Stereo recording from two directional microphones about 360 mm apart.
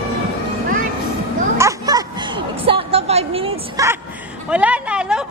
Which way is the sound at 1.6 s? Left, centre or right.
Centre.